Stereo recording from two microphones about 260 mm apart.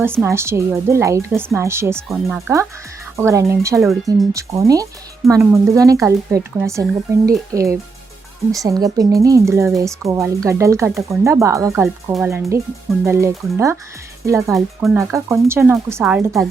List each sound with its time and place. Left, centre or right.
0.0 s speech: centre
14.5 s speech: centre
14.9 s speech: centre